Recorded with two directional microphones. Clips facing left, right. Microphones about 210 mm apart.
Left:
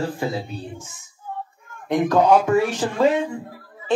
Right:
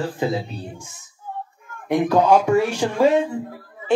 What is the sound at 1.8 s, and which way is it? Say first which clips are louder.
Speech: even; 10° right (ahead or behind).